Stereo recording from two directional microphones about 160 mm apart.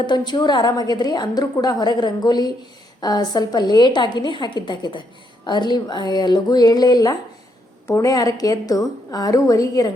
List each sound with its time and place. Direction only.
0.0 s a woman's voice: 30° left (ahead or behind)